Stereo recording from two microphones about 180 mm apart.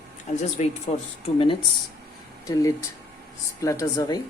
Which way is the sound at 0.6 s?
35° left (ahead or behind).